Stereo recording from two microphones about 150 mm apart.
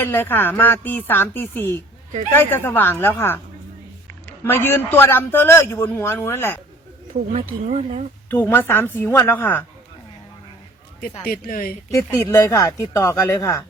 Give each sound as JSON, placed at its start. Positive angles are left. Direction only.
{"t": 0.0, "sound": "a man's voice", "side_deg": 15}
{"t": 4.4, "sound": "a man's voice", "side_deg": 15}
{"t": 7.1, "sound": "speech", "side_deg": -45}
{"t": 8.3, "sound": "a man's voice", "side_deg": 15}
{"t": 11.3, "sound": "speech", "side_deg": 70}
{"t": 11.9, "sound": "a man's voice", "side_deg": 20}